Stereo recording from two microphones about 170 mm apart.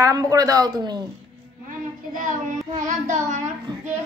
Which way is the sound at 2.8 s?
45° right (ahead or behind).